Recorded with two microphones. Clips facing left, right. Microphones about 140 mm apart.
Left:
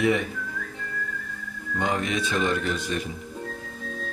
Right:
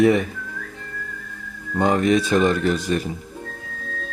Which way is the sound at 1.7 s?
40° right (ahead or behind).